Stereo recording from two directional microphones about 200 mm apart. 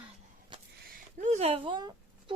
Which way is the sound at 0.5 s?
25° right (ahead or behind).